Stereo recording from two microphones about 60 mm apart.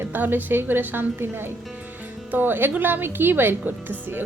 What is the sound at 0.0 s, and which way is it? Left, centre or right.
A woman's voice, right.